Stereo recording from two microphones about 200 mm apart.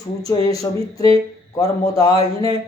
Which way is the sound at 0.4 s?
15° left (ahead or behind).